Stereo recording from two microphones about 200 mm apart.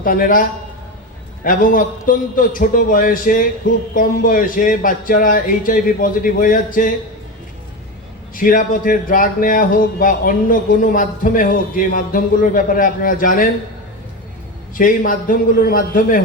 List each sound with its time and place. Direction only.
0.0 s speech: 45° left (ahead or behind)
1.5 s speech: 45° left (ahead or behind)
8.4 s speech: 40° left (ahead or behind)
14.8 s speech: 45° left (ahead or behind)